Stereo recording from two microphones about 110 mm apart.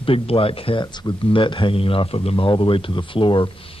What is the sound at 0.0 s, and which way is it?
Speech, 55° left (ahead or behind).